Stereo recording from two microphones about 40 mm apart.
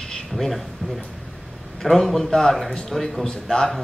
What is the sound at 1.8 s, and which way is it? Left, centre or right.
Speech, centre.